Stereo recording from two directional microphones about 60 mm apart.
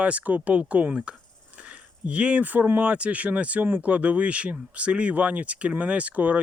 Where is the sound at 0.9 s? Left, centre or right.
Centre.